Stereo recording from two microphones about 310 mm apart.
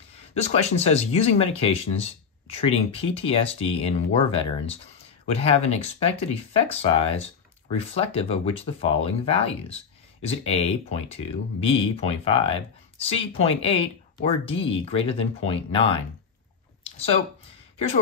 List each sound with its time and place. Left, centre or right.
0.3 s speech: left